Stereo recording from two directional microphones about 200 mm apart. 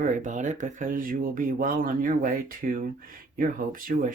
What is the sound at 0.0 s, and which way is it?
Speech, 40° right (ahead or behind).